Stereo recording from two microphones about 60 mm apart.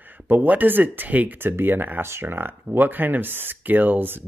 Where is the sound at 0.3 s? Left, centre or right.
Right.